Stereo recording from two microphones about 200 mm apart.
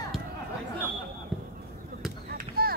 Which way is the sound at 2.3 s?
50° right (ahead or behind).